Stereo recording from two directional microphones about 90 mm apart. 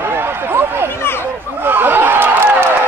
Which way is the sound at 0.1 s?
25° right (ahead or behind).